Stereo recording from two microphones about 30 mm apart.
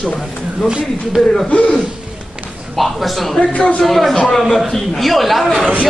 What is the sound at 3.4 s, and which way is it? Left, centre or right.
Speech, left.